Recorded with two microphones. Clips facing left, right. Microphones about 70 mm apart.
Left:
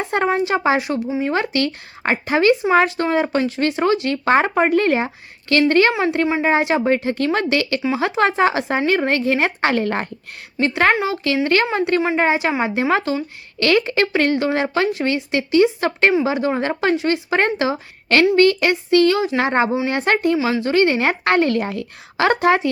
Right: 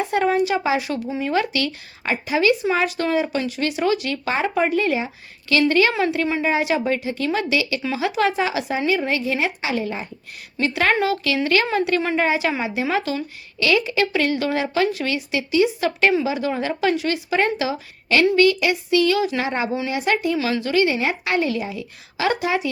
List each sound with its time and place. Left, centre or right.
0.1 s speech: left
4.3 s a woman's voice: left
5.9 s a woman's voice: left
6.4 s a woman's voice: left
10.6 s speech: left
10.9 s a woman's voice: left
13.6 s speech: left
16.9 s a woman's voice: left
17.2 s a woman's voice: left
20.3 s a woman's voice: left
20.7 s a woman's voice: left